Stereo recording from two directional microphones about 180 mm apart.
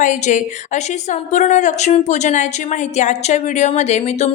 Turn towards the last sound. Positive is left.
turn(degrees=40)  # may be behind; listen again after turning